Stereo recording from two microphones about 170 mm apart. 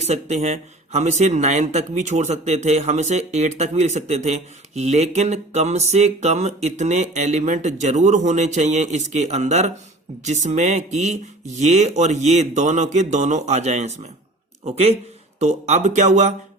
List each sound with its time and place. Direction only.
0.0 s a man's voice: 40° right (ahead or behind)